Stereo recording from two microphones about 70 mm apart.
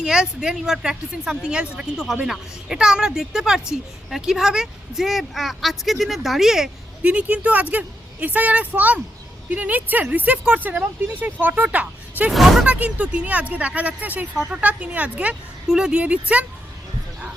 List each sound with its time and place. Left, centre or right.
0.0 s a woman's voice: centre
7.0 s speech: centre
12.3 s a woman's voice: centre
12.6 s speech: right
15.6 s speech: centre